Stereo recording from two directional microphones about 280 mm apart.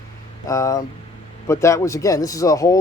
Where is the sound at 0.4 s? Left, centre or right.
Centre.